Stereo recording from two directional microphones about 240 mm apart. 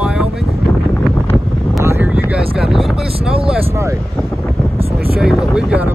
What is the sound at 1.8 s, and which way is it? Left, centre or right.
Vehicle, centre.